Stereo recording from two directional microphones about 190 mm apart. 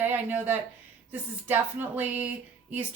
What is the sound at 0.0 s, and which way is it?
A woman's voice, 10° right (ahead or behind).